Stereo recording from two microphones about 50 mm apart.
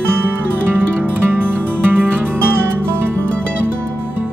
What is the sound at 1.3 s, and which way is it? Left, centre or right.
Music, right.